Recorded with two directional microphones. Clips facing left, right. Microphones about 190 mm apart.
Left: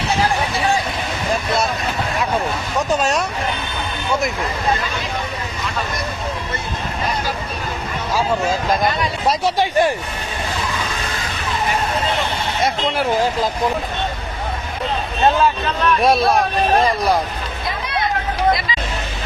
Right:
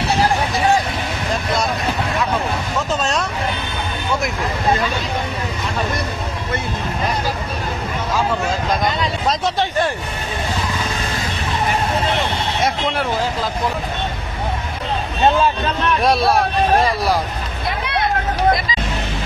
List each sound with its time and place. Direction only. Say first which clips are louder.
3.0 s speech: left 2 dB; 10° left (ahead or behind)
9.3 s speech: left 4 dB; 10° left (ahead or behind)
16.0 s speech: even; centre (ahead or behind)
17.6 s a sound: right 2 dB; 65° right (ahead or behind)